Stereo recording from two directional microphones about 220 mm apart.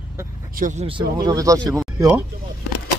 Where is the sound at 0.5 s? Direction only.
35° right (ahead or behind); by 1.8 s 15° right (ahead or behind).